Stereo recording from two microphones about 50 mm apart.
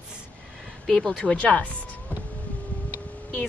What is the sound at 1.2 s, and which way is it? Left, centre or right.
Speech, left.